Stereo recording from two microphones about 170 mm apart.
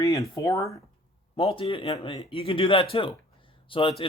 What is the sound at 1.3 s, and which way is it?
Speech, 30° left (ahead or behind).